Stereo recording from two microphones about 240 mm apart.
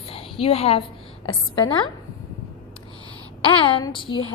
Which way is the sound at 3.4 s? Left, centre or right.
Left.